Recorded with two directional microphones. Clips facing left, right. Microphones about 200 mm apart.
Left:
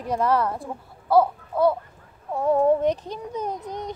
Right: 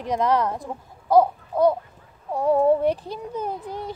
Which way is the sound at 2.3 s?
10° right (ahead or behind).